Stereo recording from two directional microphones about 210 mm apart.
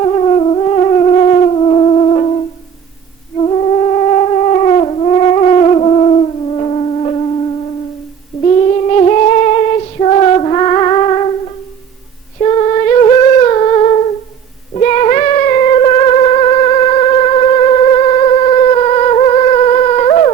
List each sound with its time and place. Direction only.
0.0 s music: 25° left (ahead or behind)
3.4 s theremin: 30° left (ahead or behind)
8.4 s music: 30° left (ahead or behind)
12.4 s humming: 30° left (ahead or behind)
14.7 s cat: 30° left (ahead or behind)